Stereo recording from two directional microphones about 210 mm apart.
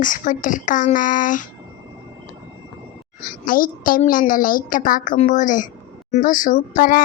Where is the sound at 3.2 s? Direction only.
40° left (ahead or behind).